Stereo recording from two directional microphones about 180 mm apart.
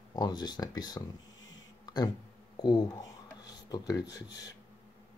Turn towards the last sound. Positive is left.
turn(degrees=20)  # may be behind; listen again after turning